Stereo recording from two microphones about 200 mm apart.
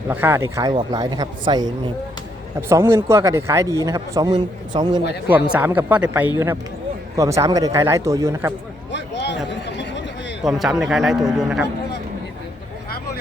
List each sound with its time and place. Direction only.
0.1 s a man's voice: 10° right (ahead or behind)
5.5 s a man's voice: 10° right (ahead or behind)
8.9 s a sound: 60° left (ahead or behind)
10.4 s a man's voice: centre (ahead or behind)